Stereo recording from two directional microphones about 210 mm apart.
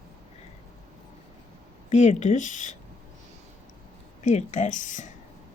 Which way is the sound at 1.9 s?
35° left (ahead or behind).